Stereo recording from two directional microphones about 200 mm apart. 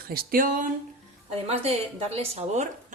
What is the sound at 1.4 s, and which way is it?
A woman's voice, 30° right (ahead or behind).